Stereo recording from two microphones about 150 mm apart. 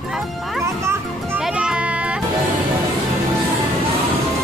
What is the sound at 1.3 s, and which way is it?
Music, 5° right (ahead or behind).